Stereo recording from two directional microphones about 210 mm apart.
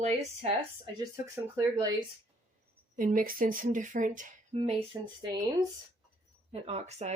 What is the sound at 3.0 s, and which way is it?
Speech, 40° right (ahead or behind).